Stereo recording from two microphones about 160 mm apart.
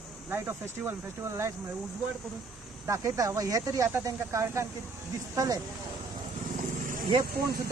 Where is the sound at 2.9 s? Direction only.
20° right (ahead or behind).